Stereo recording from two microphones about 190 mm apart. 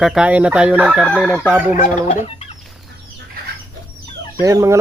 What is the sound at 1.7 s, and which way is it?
Speech, 45° left (ahead or behind).